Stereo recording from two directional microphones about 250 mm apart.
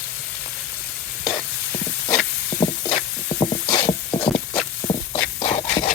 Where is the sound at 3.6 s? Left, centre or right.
Centre.